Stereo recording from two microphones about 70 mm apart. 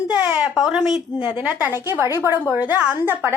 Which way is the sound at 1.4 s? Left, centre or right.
Right.